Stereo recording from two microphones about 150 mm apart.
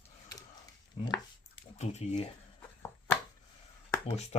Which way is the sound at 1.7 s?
45° left (ahead or behind).